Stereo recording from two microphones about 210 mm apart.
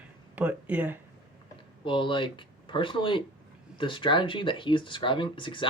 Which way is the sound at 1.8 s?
25° left (ahead or behind).